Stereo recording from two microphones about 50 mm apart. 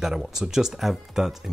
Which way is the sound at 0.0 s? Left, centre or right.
Centre.